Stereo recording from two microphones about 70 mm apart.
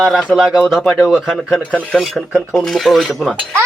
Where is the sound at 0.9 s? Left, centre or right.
Centre.